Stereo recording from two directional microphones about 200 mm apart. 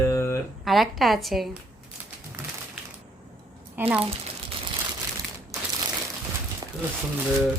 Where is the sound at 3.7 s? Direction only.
10° right (ahead or behind).